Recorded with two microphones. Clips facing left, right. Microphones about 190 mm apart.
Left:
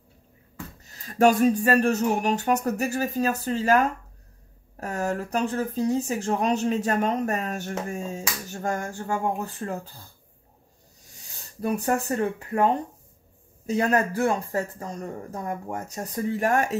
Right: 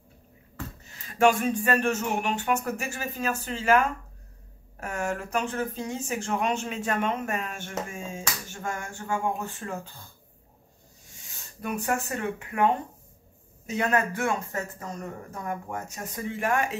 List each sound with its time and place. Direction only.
0.8 s speech: 40° left (ahead or behind)
11.1 s speech: 35° left (ahead or behind)